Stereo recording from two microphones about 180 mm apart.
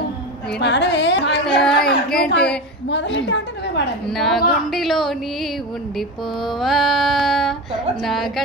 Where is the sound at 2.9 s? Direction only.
90° left.